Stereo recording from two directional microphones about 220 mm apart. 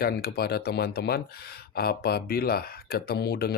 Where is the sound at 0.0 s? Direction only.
45° left (ahead or behind).